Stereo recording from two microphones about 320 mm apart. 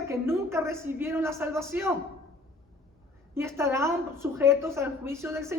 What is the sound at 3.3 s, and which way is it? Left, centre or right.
A woman's voice, centre.